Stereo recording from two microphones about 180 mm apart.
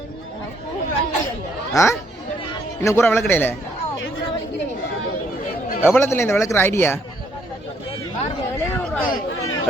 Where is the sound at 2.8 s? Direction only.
15° left (ahead or behind).